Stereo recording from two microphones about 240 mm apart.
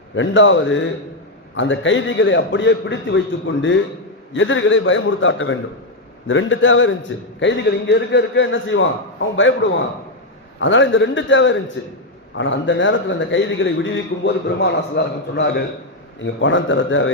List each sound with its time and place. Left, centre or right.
0.1 s a man's voice: left
10.6 s a man's voice: left